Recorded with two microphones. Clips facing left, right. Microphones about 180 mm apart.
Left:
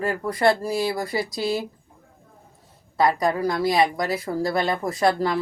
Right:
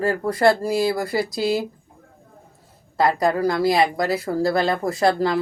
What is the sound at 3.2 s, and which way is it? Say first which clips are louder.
Speech: right 3 dB; 35° right (ahead or behind).